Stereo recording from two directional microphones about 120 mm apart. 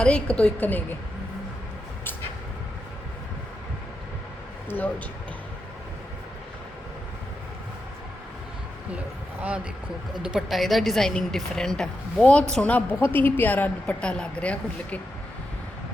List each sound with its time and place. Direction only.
0.0 s a woman's voice: 10° left (ahead or behind)
4.7 s a woman's voice: 15° left (ahead or behind)
8.9 s a sound: 10° right (ahead or behind)
10.2 s a woman's voice: 5° right (ahead or behind)